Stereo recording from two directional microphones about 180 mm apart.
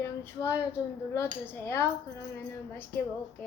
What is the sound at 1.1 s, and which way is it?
Speech, 15° left (ahead or behind).